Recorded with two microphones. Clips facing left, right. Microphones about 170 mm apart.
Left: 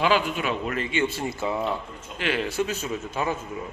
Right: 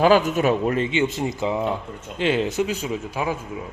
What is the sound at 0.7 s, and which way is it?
Speech, 25° right (ahead or behind).